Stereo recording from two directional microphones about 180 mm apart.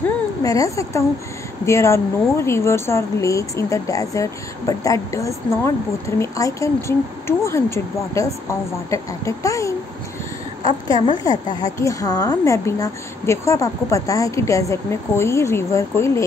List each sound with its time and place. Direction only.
0.4 s a woman's voice: 20° left (ahead or behind)
11.2 s a woman's voice: 20° left (ahead or behind)